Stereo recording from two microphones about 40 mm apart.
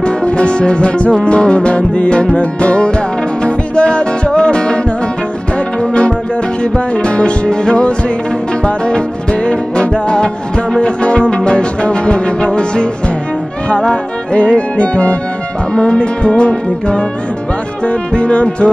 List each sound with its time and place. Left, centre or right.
0.0 s music: left
14.3 s music: left